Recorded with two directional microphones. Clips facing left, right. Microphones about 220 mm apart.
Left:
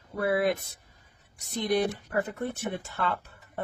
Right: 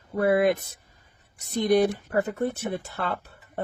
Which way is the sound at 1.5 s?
45° right (ahead or behind).